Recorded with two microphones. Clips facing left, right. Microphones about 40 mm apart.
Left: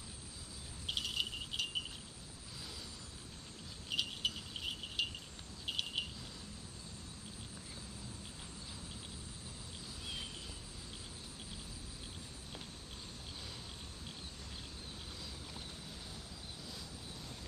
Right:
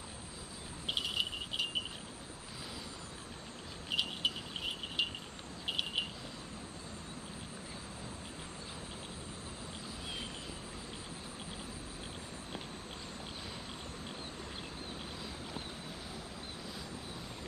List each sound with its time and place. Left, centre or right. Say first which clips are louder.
0.8 s cricket: right 3 dB; centre
3.9 s cricket: right 3 dB; centre
5.7 s a sound: right 3 dB; centre